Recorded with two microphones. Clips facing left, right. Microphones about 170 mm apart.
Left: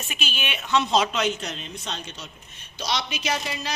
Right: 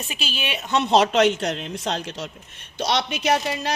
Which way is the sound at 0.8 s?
60° right (ahead or behind).